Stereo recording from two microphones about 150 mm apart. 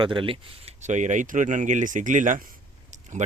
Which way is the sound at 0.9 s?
55° right (ahead or behind).